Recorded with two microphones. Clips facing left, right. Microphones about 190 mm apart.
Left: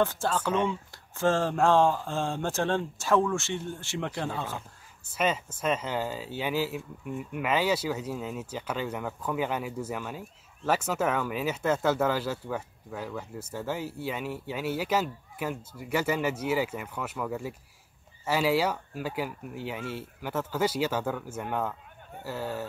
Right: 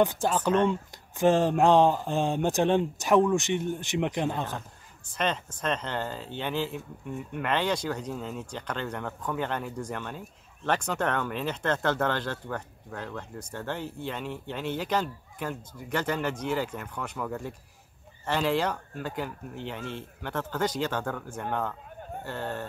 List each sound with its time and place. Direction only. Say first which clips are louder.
0.0 s speech: right 2 dB; 15° right (ahead or behind)
5.1 s speech: left 1 dB; 5° left (ahead or behind)